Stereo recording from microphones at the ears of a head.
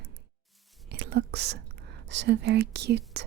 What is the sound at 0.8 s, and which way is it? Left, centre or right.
Whispering, right.